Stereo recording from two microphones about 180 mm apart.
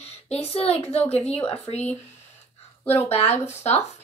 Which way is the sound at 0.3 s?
35° left (ahead or behind).